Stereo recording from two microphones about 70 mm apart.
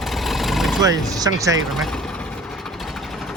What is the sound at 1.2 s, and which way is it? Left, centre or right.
Speech, right.